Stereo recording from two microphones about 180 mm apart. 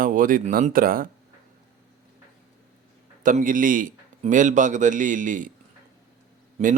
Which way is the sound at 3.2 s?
50° right (ahead or behind).